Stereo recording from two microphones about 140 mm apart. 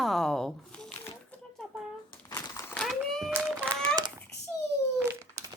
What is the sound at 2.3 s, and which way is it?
Crumpling, 25° left (ahead or behind).